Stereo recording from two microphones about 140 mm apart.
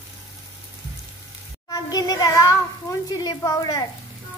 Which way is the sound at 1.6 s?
30° left (ahead or behind).